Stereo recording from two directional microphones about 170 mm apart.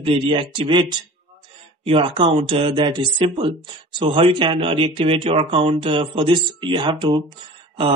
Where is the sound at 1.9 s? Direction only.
30° right (ahead or behind).